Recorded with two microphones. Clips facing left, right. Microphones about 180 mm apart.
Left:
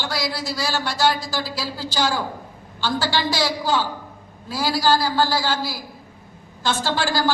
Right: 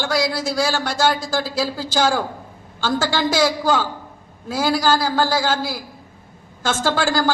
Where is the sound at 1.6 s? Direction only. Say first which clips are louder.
Right 5 dB; 50° right (ahead or behind).